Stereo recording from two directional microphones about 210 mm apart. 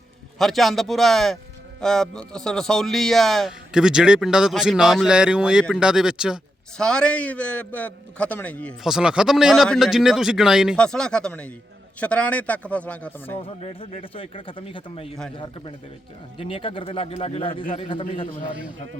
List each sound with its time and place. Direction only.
0.3 s a man's voice: centre (ahead or behind)
13.3 s speech: 25° left (ahead or behind)
16.4 s speech: 25° left (ahead or behind)